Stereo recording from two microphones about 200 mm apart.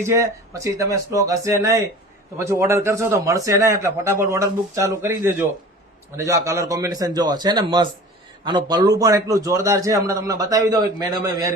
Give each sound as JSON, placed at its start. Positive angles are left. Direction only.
{"t": 0.1, "sound": "a man's voice", "side_deg": -15}